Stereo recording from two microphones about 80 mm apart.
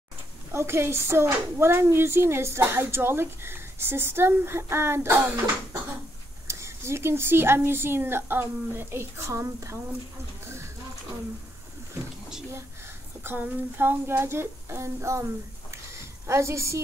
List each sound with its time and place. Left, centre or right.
0.5 s speech: right
13.2 s speech: right
16.3 s speech: right